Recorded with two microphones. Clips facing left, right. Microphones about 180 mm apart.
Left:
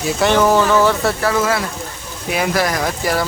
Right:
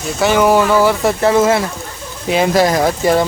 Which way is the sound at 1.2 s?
25° right (ahead or behind).